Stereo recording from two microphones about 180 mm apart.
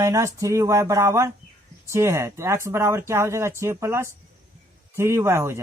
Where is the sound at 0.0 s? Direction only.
15° right (ahead or behind).